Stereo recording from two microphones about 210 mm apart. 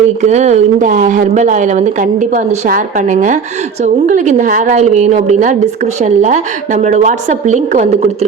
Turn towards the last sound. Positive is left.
turn(degrees=-35)  # may be behind; listen again after turning